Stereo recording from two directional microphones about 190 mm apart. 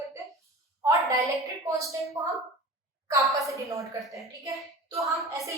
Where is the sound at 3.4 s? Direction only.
15° right (ahead or behind).